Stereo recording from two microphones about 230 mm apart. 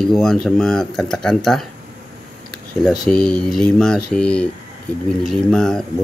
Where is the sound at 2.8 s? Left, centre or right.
Centre.